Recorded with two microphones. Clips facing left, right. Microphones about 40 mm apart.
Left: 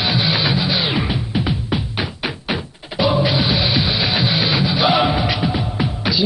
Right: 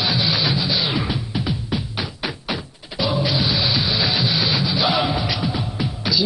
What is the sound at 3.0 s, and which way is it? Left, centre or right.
Music, left.